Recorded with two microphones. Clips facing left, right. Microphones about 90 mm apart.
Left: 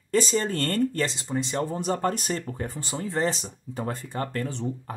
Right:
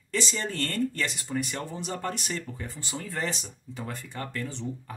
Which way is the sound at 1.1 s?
25° left (ahead or behind).